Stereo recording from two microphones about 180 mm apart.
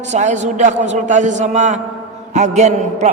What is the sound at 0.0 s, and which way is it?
A man's voice, 40° right (ahead or behind).